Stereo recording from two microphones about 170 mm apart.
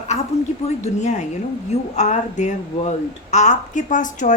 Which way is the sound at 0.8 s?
45° left (ahead or behind).